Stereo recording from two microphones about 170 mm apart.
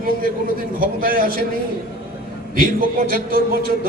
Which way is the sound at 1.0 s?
55° right (ahead or behind).